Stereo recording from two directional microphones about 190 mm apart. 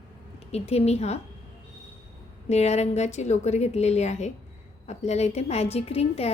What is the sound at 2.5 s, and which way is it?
A woman's voice, 35° left (ahead or behind).